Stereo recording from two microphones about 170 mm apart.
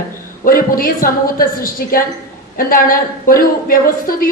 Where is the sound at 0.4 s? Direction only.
55° left (ahead or behind).